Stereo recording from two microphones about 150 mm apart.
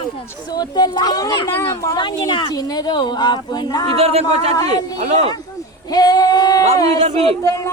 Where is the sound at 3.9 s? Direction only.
40° right (ahead or behind).